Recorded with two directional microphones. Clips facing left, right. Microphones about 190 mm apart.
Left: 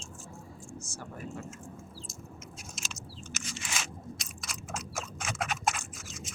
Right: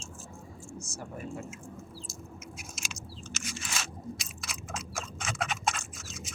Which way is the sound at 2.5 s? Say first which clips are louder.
Right 1 dB; 10° right (ahead or behind).